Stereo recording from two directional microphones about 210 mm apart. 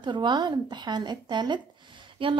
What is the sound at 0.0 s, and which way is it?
A woman's voice, 20° right (ahead or behind).